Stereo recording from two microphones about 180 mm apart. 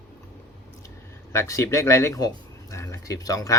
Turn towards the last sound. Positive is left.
turn(degrees=20)  # may be behind; listen again after turning